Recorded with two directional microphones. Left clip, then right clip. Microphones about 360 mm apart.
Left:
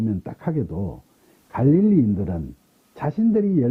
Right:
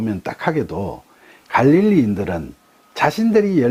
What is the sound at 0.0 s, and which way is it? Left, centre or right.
Speech, centre.